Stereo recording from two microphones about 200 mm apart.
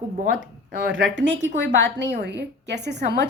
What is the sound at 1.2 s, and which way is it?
A woman's voice, 65° right (ahead or behind).